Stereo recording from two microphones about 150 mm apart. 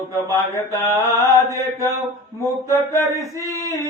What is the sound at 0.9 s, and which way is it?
Mantra, 20° left (ahead or behind).